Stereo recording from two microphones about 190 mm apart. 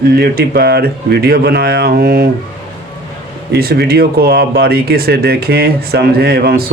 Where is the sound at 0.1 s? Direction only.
55° right (ahead or behind).